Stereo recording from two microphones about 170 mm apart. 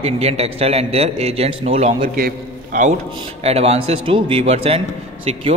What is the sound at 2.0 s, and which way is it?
Speech, 60° right (ahead or behind).